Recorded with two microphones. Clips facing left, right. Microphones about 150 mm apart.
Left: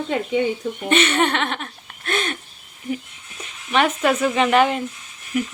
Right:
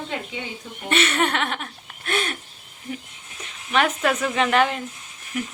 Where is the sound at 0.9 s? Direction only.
Centre (ahead or behind).